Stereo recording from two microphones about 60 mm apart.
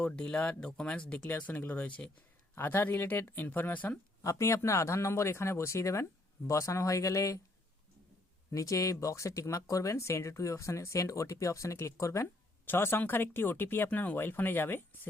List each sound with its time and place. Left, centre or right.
0.0 s speech: left
2.6 s speech: left
4.2 s speech: left
8.4 s speech: left
12.6 s speech: left